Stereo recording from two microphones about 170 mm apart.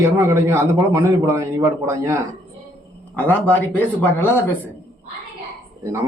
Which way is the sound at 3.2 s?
10° left (ahead or behind).